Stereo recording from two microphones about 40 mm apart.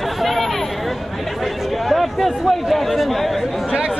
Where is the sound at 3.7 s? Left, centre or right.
Right.